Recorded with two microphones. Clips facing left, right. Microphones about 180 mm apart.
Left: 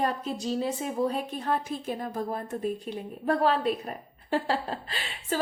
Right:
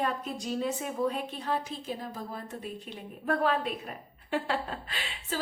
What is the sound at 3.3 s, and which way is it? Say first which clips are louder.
A woman's voice: left 4 dB; 35° left (ahead or behind).